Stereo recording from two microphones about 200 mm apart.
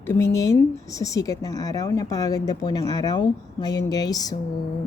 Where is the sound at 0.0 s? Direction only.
10° left (ahead or behind).